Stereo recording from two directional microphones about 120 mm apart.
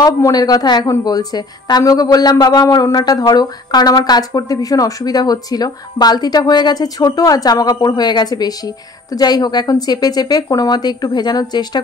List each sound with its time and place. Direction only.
0.0 s a woman's voice: 30° left (ahead or behind)